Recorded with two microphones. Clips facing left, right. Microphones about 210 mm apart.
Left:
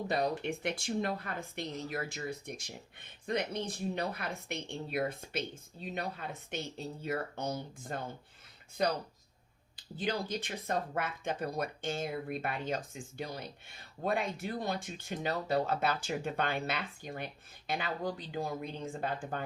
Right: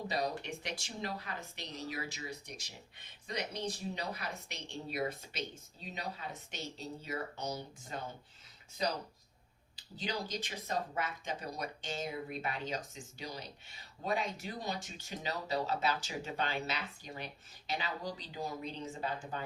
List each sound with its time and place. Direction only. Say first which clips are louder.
0.1 s speech: left 5 dB; 55° left (ahead or behind)